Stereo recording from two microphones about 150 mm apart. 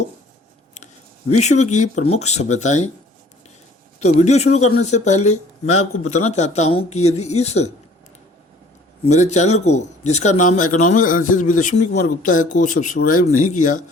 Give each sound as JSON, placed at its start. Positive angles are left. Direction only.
{"t": 1.3, "sound": "speech", "side_deg": 50}
{"t": 4.2, "sound": "speech", "side_deg": 50}
{"t": 9.0, "sound": "a man's voice", "side_deg": 50}